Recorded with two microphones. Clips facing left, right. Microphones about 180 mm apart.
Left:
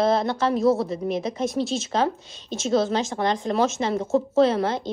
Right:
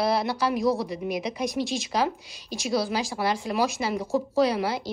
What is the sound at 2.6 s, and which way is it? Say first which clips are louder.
A woman's voice: left 4 dB; 10° right (ahead or behind).